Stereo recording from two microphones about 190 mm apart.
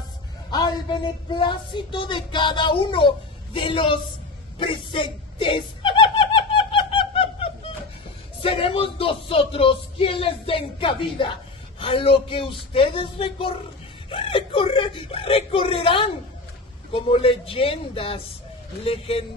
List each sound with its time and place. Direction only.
0.5 s music: 25° left (ahead or behind)
4.6 s snicker: 25° left (ahead or behind)
8.4 s music: 30° left (ahead or behind)